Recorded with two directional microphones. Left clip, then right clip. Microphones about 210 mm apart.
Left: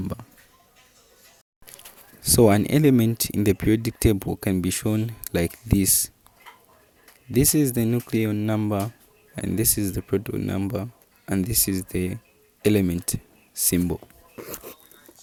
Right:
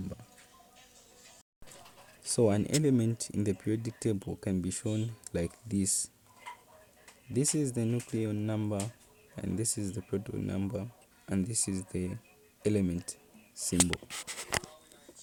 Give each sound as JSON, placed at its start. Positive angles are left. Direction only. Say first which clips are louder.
{"t": 2.2, "sound": "speech", "louder": "left 10 dB", "side_deg": 30}
{"t": 7.3, "sound": "speech", "louder": "left 10 dB", "side_deg": 25}